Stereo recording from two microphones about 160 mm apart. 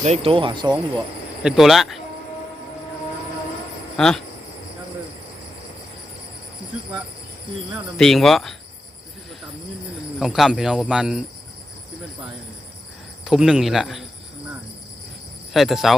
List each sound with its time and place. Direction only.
0.0 s speech: 40° right (ahead or behind)
1.5 s speech: centre (ahead or behind)
3.9 s speech: 5° left (ahead or behind)
7.9 s speech: centre (ahead or behind)
10.2 s speech: centre (ahead or behind)
13.2 s speech: 5° right (ahead or behind)
15.5 s speech: centre (ahead or behind)